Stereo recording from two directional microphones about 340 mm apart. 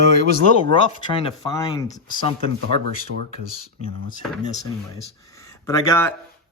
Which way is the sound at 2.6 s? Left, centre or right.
Right.